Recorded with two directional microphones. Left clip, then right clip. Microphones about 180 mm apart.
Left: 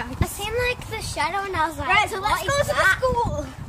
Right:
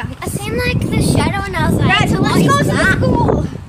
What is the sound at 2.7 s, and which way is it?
Speech, 40° right (ahead or behind).